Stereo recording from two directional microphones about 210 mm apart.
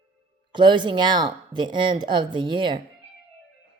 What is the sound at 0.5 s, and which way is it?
Speech, 20° right (ahead or behind).